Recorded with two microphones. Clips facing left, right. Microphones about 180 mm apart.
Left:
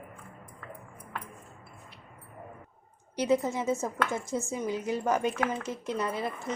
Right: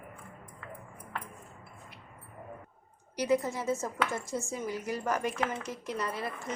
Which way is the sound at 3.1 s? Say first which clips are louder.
Left 2 dB; 25° left (ahead or behind).